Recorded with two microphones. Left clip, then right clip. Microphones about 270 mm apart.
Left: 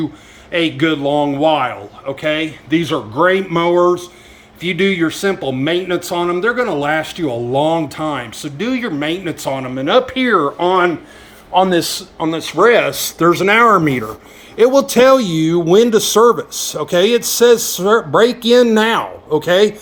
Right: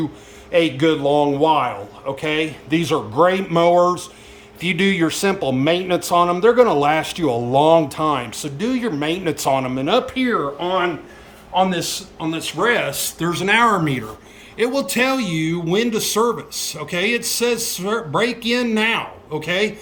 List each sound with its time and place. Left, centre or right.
0.5 s speech: centre
10.3 s speech: left